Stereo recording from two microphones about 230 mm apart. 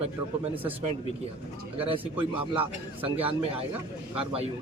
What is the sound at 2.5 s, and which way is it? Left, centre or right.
Speech, right.